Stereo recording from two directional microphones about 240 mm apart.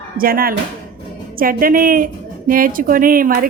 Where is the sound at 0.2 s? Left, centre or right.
Right.